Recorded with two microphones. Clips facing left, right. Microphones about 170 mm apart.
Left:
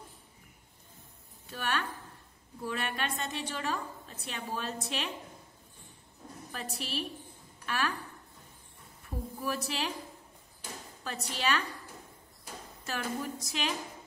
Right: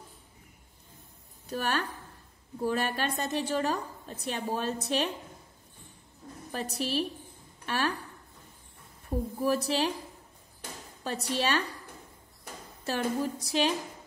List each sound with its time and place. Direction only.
1.5 s a woman's voice: 40° right (ahead or behind)
6.5 s a woman's voice: 40° right (ahead or behind)
9.4 s a woman's voice: 35° right (ahead or behind)
11.1 s a woman's voice: 35° right (ahead or behind)
12.8 s a woman's voice: 35° right (ahead or behind)